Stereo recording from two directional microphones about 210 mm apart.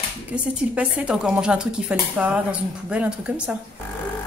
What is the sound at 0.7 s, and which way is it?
Speech, 5° right (ahead or behind).